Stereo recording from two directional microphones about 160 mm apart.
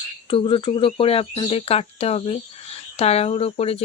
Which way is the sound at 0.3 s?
35° left (ahead or behind).